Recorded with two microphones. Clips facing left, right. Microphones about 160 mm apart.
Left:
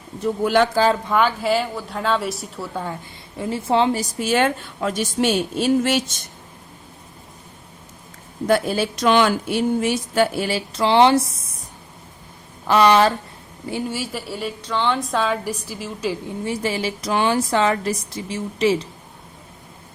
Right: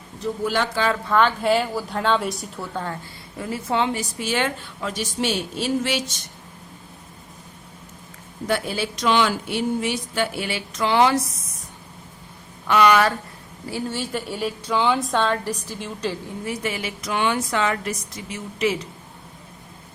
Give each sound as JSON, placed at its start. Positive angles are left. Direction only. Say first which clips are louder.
{"t": 0.4, "sound": "speech", "louder": "left 7 dB", "side_deg": 55}
{"t": 1.0, "sound": "a woman's voice", "louder": "even", "side_deg": 10}
{"t": 3.3, "sound": "a woman's voice", "louder": "left 4 dB", "side_deg": 25}
{"t": 4.2, "sound": "a woman's voice", "louder": "left 6 dB", "side_deg": 45}
{"t": 8.4, "sound": "a woman's voice", "louder": "left 5 dB", "side_deg": 45}
{"t": 12.6, "sound": "a woman's voice", "louder": "left 2 dB", "side_deg": 30}
{"t": 13.7, "sound": "a woman's voice", "louder": "left 1 dB", "side_deg": 15}
{"t": 16.4, "sound": "a woman's voice", "louder": "left 4 dB", "side_deg": 30}